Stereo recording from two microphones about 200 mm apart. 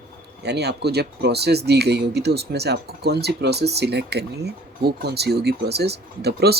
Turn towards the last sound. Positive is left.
turn(degrees=-55)  # may be behind; listen again after turning